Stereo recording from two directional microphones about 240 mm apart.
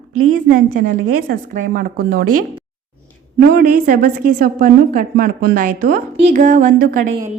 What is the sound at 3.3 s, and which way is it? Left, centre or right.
A woman's voice, right.